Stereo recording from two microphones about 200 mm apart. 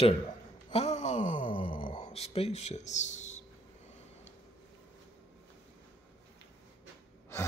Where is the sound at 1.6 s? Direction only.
25° left (ahead or behind).